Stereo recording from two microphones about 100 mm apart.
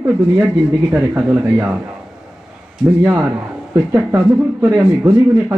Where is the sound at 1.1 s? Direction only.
20° right (ahead or behind).